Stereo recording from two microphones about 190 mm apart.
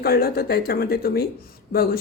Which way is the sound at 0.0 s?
55° left (ahead or behind).